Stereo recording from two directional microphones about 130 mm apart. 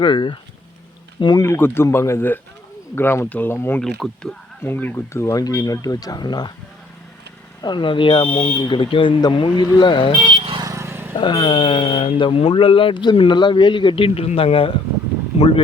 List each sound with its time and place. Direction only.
0.0 s speech: 35° left (ahead or behind)
1.5 s speech: 20° left (ahead or behind)
3.8 s speech: 5° left (ahead or behind)
4.6 s speech: 15° left (ahead or behind); by 6.5 s 35° left (ahead or behind)
7.6 s speech: 35° left (ahead or behind)
10.2 s vehicle: 35° right (ahead or behind)
10.7 s vehicle: 20° right (ahead or behind)
11.2 s speech: 40° left (ahead or behind)